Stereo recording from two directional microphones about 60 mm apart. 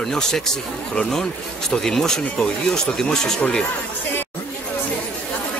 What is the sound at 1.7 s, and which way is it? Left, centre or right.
Speech, centre.